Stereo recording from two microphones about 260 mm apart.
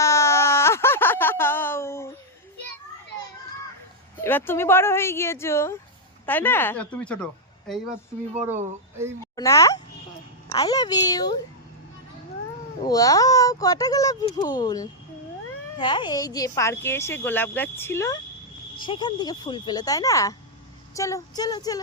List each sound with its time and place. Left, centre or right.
0.0 s a sound: centre
4.2 s speech: centre
9.3 s speech: centre
12.8 s speech: centre